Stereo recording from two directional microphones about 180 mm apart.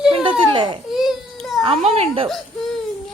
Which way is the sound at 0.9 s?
Centre (ahead or behind).